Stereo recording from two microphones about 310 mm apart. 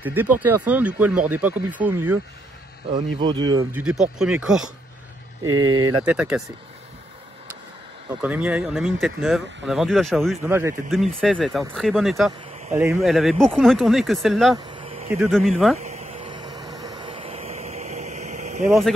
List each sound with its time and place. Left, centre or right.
0.0 s speech: centre
3.8 s speech: centre
5.4 s speech: right
6.0 s speech: centre
8.2 s speech: centre
12.3 s a sound: centre
12.7 s speech: centre
14.6 s a sound: centre
15.1 s speech: centre
15.8 s vehicle: right
18.7 s speech: centre